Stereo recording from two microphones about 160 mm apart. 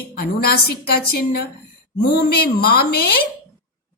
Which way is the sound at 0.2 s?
75° left (ahead or behind).